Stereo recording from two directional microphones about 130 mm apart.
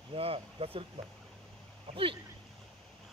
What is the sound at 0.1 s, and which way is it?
Speech, 45° right (ahead or behind).